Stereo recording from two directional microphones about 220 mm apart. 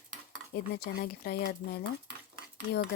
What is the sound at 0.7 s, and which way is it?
Speech, 45° left (ahead or behind).